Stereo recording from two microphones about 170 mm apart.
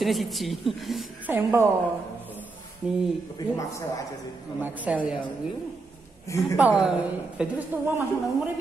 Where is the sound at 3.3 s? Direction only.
25° left (ahead or behind).